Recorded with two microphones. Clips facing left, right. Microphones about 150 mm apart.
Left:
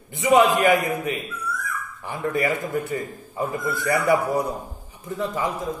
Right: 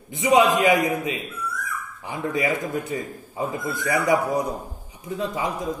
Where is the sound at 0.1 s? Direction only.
15° right (ahead or behind).